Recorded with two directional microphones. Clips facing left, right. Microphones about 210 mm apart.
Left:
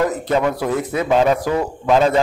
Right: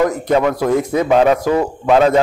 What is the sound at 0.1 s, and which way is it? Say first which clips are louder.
A man's voice: right 3 dB; 15° right (ahead or behind).